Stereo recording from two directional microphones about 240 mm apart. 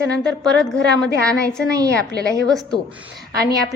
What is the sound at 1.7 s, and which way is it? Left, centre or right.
Speech, centre.